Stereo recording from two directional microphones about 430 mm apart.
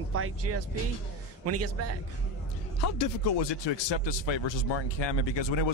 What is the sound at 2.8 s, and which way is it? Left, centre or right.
Speech, left.